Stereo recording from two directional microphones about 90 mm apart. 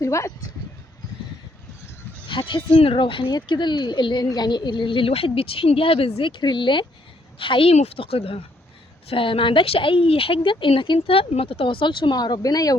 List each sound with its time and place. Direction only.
0.0 s speech: 35° left (ahead or behind)
2.2 s a sound: 65° left (ahead or behind)
2.7 s speech: 85° left
3.3 s a woman's voice: 55° left (ahead or behind)